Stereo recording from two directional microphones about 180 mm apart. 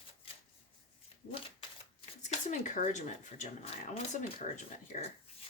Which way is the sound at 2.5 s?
45° left (ahead or behind).